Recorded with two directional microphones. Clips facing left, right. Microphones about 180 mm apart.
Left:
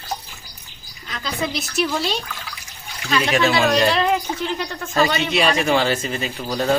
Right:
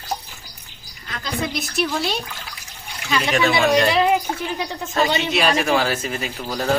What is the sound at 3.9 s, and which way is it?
Speech, 10° right (ahead or behind).